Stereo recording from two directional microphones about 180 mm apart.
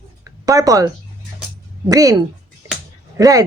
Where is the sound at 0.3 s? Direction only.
20° right (ahead or behind).